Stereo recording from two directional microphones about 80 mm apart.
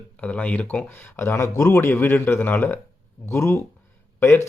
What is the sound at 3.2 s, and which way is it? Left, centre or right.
Speech, left.